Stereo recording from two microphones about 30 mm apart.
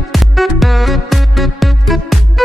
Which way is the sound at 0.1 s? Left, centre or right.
Centre.